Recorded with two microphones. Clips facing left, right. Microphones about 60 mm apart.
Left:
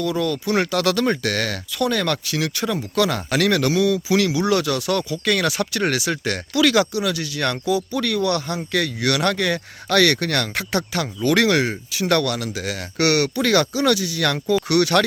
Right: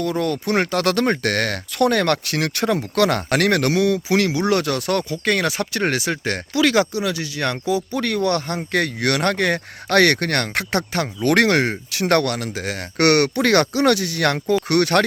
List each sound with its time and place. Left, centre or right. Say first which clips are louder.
0.0 s speech: even; right
14.7 s speech: even; right